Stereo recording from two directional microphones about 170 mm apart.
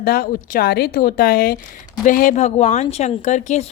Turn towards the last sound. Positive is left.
turn(degrees=45)  # may be behind; listen again after turning